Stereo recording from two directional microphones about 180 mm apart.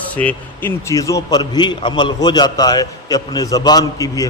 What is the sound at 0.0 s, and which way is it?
A man's voice, 10° left (ahead or behind).